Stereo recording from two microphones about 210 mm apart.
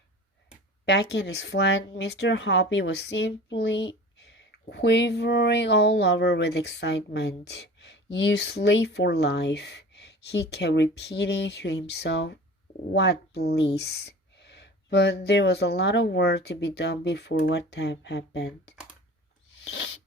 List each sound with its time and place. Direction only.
0.9 s speech: 55° left (ahead or behind)
19.6 s filing: 60° left (ahead or behind)